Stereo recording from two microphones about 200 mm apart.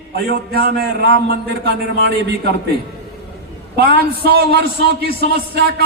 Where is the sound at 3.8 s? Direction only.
50° right (ahead or behind).